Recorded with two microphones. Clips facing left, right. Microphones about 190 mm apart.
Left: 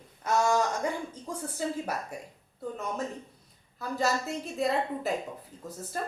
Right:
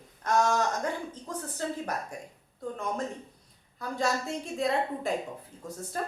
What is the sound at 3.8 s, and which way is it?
A woman's voice, 5° left (ahead or behind).